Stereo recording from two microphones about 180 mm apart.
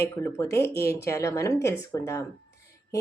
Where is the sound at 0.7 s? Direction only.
60° left (ahead or behind).